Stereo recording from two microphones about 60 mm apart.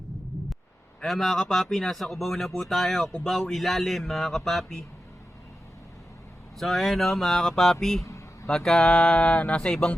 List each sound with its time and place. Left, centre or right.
1.0 s speech: centre
6.6 s speech: centre
8.9 s music: left
9.6 s speech: centre